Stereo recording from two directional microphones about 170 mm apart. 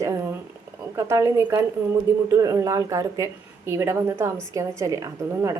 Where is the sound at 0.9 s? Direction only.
15° right (ahead or behind).